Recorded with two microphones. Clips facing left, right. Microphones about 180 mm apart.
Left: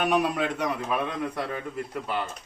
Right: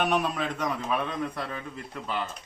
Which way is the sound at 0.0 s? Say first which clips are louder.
Left 2 dB; 5° left (ahead or behind).